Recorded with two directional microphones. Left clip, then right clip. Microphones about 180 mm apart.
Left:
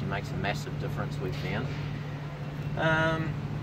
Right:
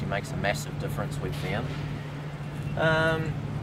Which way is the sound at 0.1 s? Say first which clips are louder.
Right 4 dB; 10° right (ahead or behind).